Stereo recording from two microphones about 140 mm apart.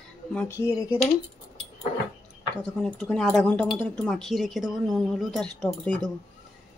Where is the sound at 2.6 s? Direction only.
10° left (ahead or behind).